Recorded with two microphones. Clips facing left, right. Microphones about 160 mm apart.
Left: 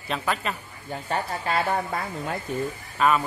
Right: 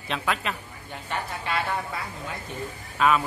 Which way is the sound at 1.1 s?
40° left (ahead or behind).